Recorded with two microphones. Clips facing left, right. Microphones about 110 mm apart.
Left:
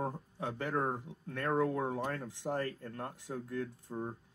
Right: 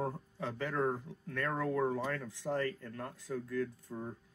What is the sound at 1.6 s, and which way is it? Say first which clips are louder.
Speech: right 1 dB; 25° left (ahead or behind).